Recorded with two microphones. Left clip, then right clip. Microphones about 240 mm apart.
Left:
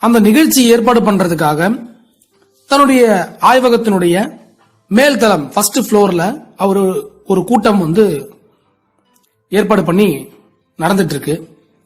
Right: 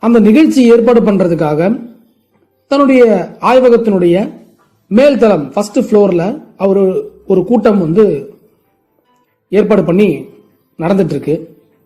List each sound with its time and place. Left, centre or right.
0.0 s a woman's voice: left
9.5 s speech: left